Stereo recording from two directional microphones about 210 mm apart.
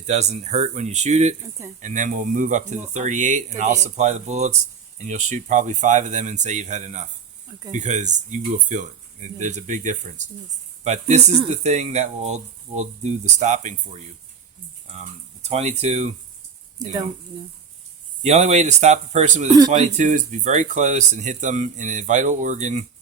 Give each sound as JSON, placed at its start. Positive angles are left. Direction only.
{"t": 0.0, "sound": "speech", "side_deg": -30}
{"t": 15.4, "sound": "speech", "side_deg": -30}
{"t": 18.2, "sound": "speech", "side_deg": -30}